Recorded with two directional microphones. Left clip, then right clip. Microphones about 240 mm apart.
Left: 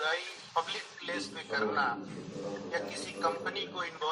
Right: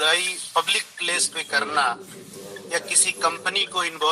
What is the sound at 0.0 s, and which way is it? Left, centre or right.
A man's voice, right.